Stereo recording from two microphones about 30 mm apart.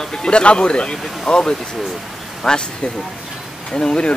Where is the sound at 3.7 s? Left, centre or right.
Left.